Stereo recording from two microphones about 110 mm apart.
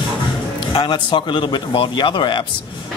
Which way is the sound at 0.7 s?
45° left (ahead or behind).